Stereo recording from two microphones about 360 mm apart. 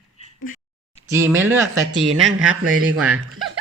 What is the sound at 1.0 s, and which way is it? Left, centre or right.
Speech, centre.